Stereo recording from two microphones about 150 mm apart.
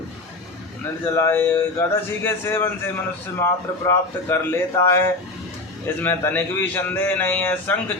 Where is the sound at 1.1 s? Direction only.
15° left (ahead or behind).